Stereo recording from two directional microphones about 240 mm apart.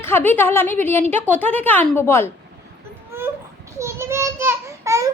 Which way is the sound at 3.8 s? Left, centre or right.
Centre.